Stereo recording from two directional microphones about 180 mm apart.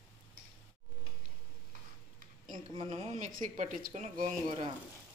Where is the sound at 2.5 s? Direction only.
30° right (ahead or behind).